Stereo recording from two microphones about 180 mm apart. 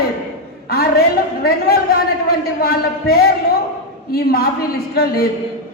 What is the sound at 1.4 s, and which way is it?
A man's voice, 60° left (ahead or behind).